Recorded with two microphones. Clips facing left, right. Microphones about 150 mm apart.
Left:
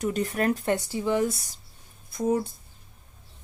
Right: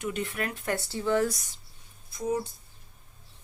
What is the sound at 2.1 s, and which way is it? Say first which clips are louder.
Speech: left 5 dB; 50° left (ahead or behind).